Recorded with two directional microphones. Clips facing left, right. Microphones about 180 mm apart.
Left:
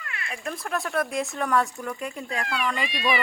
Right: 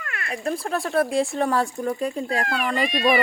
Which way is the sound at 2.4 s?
45° right (ahead or behind).